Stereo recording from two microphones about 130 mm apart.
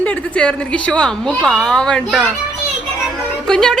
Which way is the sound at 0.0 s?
10° left (ahead or behind).